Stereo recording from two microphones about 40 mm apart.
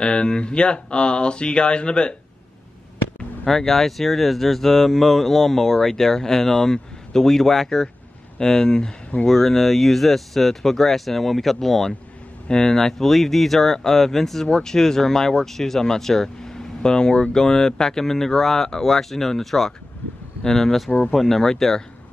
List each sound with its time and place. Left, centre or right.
0.0 s speech: left
3.4 s speech: centre
12.4 s speech: centre